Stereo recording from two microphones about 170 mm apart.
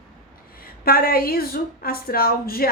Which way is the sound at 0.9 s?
60° left (ahead or behind).